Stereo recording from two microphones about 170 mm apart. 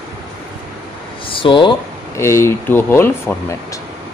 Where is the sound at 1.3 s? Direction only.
30° left (ahead or behind).